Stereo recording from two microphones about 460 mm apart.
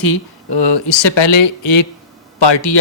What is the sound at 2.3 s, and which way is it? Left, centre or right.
Speech, left.